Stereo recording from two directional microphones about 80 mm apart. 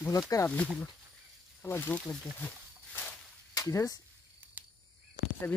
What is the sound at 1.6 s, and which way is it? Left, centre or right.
Speech, left.